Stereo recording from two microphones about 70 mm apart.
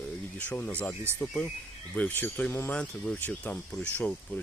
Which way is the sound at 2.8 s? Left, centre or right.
Centre.